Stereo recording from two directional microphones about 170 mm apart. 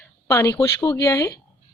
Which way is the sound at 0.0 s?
15° left (ahead or behind).